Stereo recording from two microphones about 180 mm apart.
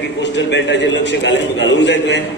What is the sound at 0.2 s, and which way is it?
A man's voice, 80° left.